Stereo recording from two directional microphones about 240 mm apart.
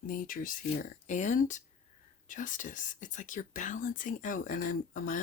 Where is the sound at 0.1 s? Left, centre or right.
Left.